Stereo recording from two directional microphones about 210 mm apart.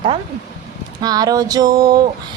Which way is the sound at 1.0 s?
20° right (ahead or behind).